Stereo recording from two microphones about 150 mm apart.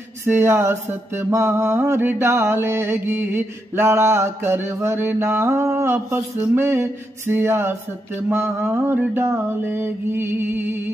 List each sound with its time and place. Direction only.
0.2 s mantra: 15° right (ahead or behind)